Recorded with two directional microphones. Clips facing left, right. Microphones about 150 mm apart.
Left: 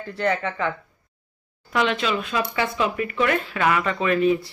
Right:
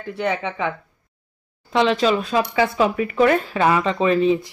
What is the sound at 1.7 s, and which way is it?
Speech, 30° right (ahead or behind).